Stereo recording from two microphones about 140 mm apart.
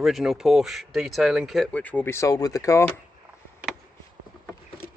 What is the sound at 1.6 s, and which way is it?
Speech, 10° left (ahead or behind).